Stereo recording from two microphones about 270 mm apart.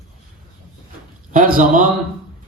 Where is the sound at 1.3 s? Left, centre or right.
Right.